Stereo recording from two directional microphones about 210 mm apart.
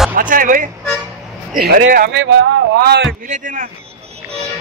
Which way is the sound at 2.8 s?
50° right (ahead or behind).